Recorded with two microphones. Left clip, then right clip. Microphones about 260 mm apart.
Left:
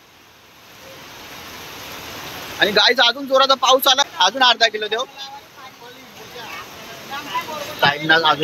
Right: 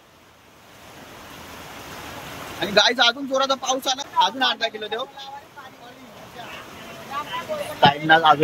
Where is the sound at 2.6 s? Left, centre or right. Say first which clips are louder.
Left 4 dB; centre.